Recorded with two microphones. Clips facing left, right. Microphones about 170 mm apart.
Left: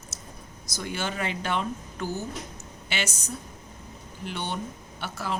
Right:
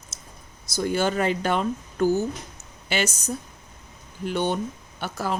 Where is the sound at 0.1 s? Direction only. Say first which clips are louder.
Left 3 dB; 20° right (ahead or behind).